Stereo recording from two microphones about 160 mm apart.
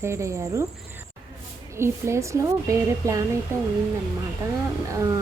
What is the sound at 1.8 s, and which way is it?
A woman's voice, 15° right (ahead or behind).